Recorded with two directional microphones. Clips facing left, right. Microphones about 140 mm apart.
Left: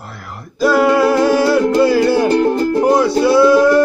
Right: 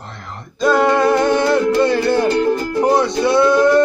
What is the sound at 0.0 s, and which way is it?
Music, 5° left (ahead or behind).